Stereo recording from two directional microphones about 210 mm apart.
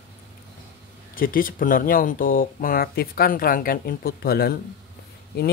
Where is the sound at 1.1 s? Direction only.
40° left (ahead or behind).